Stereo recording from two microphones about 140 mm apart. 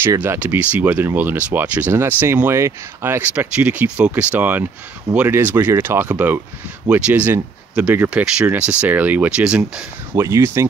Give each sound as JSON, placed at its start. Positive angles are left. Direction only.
{"t": 0.0, "sound": "speech", "side_deg": -15}
{"t": 10.1, "sound": "speech", "side_deg": -20}